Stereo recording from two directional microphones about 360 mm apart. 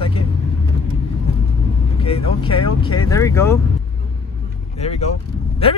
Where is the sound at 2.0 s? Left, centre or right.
Centre.